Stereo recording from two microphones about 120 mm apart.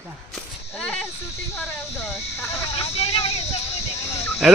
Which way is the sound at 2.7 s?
55° left (ahead or behind).